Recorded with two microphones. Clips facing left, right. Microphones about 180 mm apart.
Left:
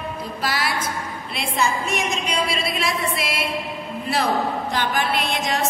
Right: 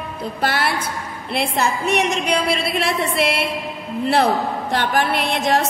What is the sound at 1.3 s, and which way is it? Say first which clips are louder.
A woman's voice: right 3 dB; 60° right (ahead or behind).